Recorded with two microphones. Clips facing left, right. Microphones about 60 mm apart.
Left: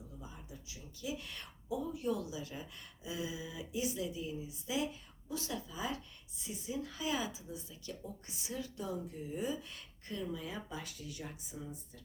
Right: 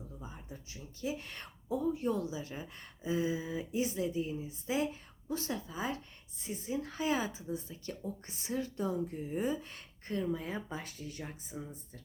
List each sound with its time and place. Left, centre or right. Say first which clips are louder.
0.2 s speech: right 3 dB; right
11.2 s speech: right 2 dB; right